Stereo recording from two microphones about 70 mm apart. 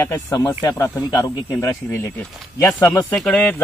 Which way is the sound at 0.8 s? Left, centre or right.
Left.